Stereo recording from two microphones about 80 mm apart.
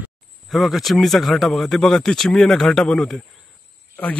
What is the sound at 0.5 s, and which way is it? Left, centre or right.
A man's voice, centre.